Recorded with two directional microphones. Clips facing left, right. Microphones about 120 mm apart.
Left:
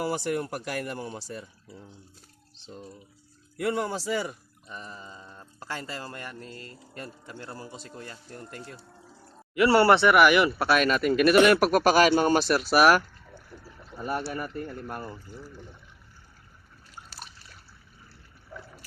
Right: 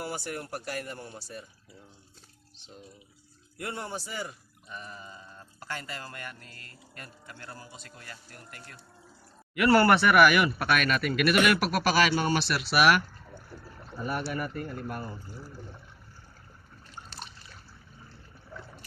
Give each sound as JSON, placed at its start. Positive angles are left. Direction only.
{"t": 0.0, "sound": "speech", "side_deg": 90}
{"t": 3.6, "sound": "speech", "side_deg": 90}
{"t": 4.7, "sound": "speech", "side_deg": 30}
{"t": 11.7, "sound": "speech", "side_deg": 45}
{"t": 14.0, "sound": "speech", "side_deg": 35}
{"t": 16.9, "sound": "a sound", "side_deg": 5}